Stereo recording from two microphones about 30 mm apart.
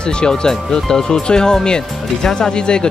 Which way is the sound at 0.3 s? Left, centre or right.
Centre.